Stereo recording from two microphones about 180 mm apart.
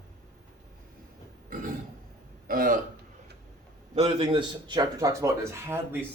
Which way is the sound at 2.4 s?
50° right (ahead or behind).